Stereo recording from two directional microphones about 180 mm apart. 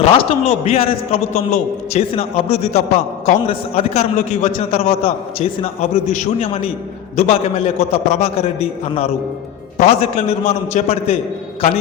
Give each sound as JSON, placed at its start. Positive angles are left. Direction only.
{"t": 0.0, "sound": "a man's voice", "side_deg": 35}